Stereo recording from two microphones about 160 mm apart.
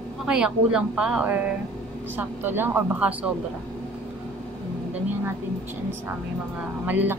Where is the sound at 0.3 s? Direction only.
5° right (ahead or behind).